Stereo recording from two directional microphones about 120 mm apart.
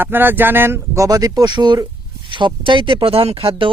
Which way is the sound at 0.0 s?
15° right (ahead or behind).